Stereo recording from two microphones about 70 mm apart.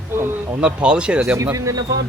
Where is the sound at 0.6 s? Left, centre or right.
Centre.